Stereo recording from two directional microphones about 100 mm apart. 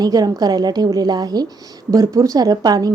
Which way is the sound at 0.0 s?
40° right (ahead or behind).